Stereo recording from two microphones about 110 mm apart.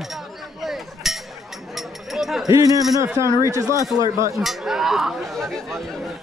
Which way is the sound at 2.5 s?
30° right (ahead or behind).